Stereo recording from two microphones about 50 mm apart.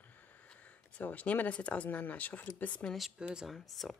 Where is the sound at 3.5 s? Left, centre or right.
Centre.